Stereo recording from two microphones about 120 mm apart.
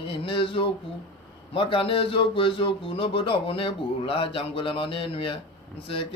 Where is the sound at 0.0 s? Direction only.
45° left (ahead or behind).